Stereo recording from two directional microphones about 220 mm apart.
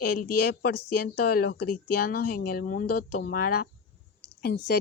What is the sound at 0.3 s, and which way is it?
A woman's voice, 45° left (ahead or behind).